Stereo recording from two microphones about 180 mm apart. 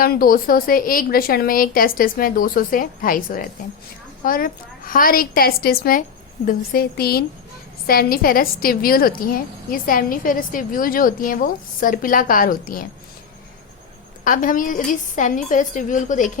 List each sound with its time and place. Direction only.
0.0 s a woman's voice: 55° left (ahead or behind)
14.3 s a woman's voice: 45° left (ahead or behind)